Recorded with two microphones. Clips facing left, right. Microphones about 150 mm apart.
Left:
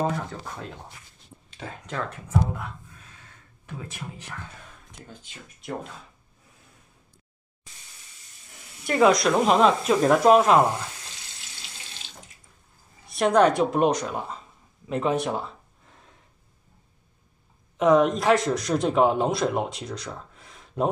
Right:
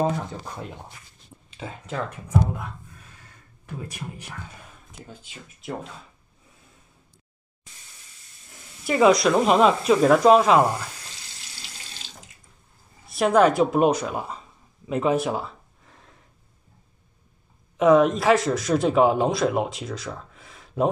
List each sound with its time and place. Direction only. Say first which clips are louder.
1.5 s speech: right 2 dB; 10° right (ahead or behind)
3.8 s speech: right 2 dB; 15° right (ahead or behind)
5.6 s a man's voice: right 1 dB; centre (ahead or behind)
8.8 s a man's voice: right 2 dB; centre (ahead or behind)
13.0 s a man's voice: right 1 dB; centre (ahead or behind)
17.7 s a man's voice: right 2 dB; centre (ahead or behind)